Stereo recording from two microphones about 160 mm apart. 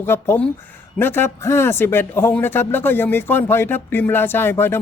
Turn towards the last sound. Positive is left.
turn(degrees=15)  # may be behind; listen again after turning